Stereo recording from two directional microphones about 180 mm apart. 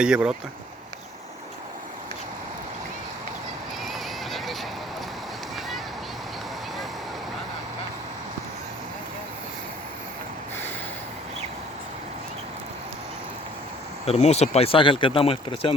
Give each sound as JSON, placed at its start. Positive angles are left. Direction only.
{"t": 0.0, "sound": "speech", "side_deg": -5}
{"t": 3.8, "sound": "horse", "side_deg": 0}
{"t": 14.0, "sound": "speech", "side_deg": 35}